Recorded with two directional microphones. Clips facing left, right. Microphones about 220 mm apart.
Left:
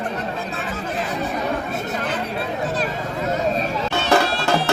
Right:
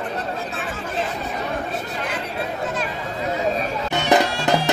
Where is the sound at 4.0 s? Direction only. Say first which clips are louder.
Right 1 dB; 15° right (ahead or behind).